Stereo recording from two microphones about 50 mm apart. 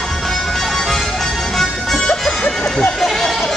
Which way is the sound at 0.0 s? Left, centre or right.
Centre.